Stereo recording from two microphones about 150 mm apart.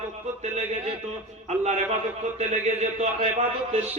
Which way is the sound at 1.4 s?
45° right (ahead or behind).